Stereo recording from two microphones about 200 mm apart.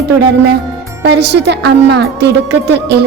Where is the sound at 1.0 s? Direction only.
55° right (ahead or behind).